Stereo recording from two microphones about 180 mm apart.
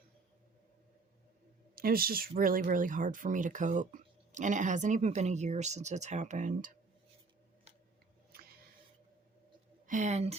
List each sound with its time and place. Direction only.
1.7 s speech: 55° right (ahead or behind)
8.3 s squish: 55° right (ahead or behind)
9.8 s speech: 45° right (ahead or behind)